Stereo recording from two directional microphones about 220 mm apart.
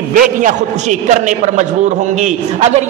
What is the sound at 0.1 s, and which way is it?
A man's voice, 35° right (ahead or behind).